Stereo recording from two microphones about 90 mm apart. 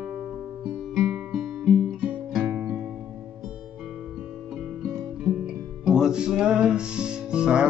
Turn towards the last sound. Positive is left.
turn(degrees=-10)  # may be behind; listen again after turning